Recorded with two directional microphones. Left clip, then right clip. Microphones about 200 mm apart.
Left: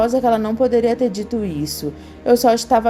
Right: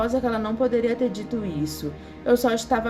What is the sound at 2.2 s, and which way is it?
Speech, 25° left (ahead or behind).